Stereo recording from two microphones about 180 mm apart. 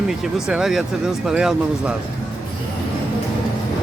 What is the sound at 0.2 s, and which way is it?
Speech, centre (ahead or behind).